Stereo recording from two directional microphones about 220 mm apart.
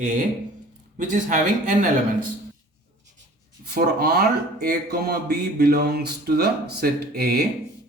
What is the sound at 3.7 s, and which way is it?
A man's voice, 45° right (ahead or behind).